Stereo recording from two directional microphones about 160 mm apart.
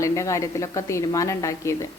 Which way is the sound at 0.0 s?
20° left (ahead or behind).